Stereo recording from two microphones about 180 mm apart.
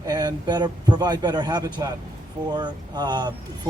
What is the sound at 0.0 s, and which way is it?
Speech, 20° right (ahead or behind).